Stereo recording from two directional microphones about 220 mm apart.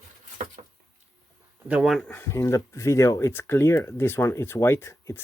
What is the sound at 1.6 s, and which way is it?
Speech, 5° right (ahead or behind).